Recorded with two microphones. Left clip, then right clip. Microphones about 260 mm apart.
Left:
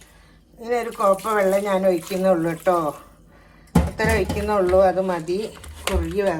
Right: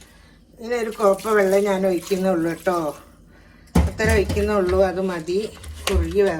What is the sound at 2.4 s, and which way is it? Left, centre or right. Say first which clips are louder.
Speech: left 2 dB; left.